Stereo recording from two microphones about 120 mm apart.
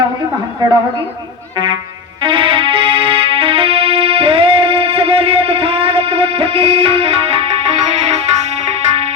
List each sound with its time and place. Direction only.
0.6 s a woman's voice: 35° right (ahead or behind)
2.2 s music: 45° right (ahead or behind); by 8.5 s 70° right (ahead or behind)